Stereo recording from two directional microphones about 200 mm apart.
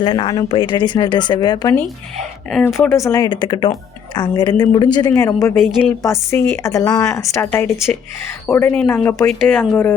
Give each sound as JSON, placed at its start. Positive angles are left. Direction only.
{"t": 0.0, "sound": "speech", "side_deg": 25}
{"t": 2.5, "sound": "speech", "side_deg": 0}
{"t": 2.7, "sound": "speech", "side_deg": 15}